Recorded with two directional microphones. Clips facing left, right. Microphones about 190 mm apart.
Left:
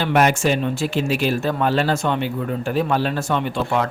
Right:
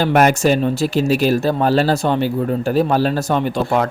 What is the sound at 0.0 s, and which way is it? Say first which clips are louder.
Speech: right 4 dB; 45° right (ahead or behind).